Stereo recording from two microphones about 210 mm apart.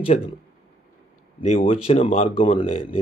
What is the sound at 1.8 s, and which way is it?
Speech, 30° left (ahead or behind).